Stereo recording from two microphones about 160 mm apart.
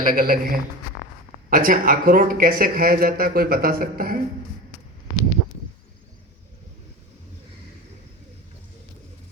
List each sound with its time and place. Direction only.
0.0 s speech: 60° right (ahead or behind)